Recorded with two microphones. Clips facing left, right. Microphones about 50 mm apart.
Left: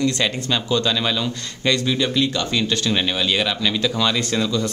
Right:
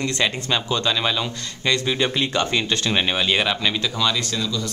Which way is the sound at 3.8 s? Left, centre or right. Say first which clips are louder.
Left 2 dB; centre.